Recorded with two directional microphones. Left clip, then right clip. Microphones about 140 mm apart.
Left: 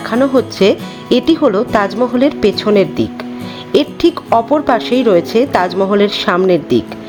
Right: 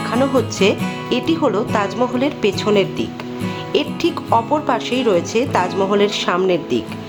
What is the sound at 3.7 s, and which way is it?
Speech, 45° left (ahead or behind).